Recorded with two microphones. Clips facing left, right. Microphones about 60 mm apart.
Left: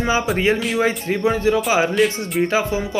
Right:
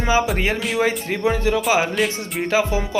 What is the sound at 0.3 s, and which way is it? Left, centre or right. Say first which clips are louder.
Speech: left 3 dB; centre.